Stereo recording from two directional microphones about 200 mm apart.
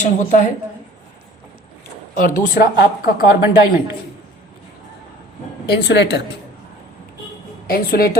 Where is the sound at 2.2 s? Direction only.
40° left (ahead or behind).